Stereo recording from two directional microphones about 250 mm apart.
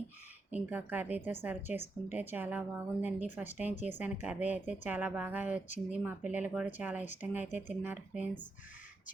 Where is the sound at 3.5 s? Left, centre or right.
Left.